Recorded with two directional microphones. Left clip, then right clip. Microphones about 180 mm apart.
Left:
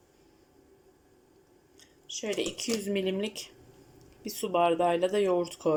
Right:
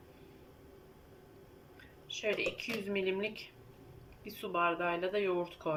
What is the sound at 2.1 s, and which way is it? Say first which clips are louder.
Speech: left 2 dB; 35° left (ahead or behind).